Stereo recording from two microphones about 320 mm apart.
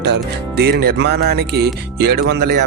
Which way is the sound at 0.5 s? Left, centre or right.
Right.